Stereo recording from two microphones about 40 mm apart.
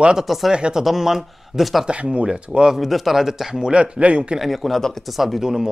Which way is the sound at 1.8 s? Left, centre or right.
Right.